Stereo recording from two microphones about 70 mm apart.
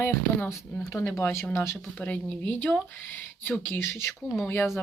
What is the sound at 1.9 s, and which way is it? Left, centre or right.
Speech, left.